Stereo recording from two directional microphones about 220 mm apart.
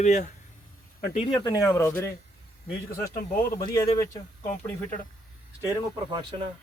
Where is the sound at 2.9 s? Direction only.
40° left (ahead or behind).